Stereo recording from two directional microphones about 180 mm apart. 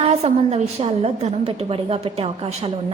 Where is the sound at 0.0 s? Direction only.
35° right (ahead or behind).